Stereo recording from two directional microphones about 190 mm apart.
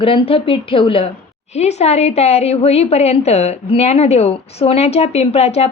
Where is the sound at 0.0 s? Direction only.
30° left (ahead or behind).